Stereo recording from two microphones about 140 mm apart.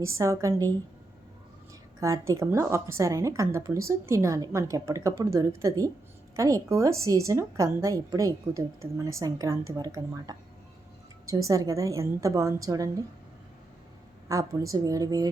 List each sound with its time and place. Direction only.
0.0 s a woman's voice: 20° right (ahead or behind)
2.0 s a woman's voice: 20° right (ahead or behind)
14.3 s a woman's voice: 25° right (ahead or behind)